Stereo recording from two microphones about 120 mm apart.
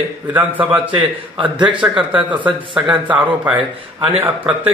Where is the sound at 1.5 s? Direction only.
40° right (ahead or behind).